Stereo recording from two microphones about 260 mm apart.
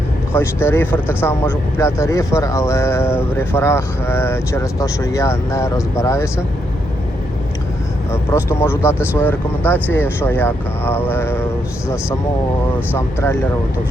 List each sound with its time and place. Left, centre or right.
0.3 s speech: centre
8.1 s speech: centre
12.9 s speech: centre